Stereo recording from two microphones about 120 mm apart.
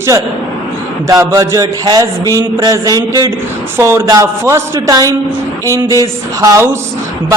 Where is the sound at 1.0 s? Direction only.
30° right (ahead or behind).